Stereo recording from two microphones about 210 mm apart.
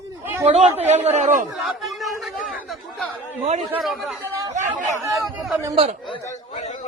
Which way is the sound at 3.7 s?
Centre (ahead or behind).